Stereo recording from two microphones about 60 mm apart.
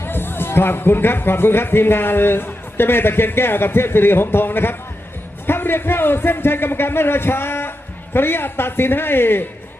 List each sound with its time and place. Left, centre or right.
0.0 s speech: left